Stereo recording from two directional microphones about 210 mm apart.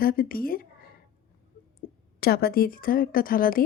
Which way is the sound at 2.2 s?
50° left (ahead or behind).